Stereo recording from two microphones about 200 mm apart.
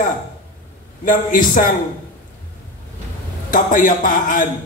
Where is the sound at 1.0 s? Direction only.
40° left (ahead or behind).